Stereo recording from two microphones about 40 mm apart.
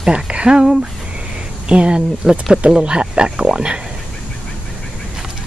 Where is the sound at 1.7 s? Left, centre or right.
Right.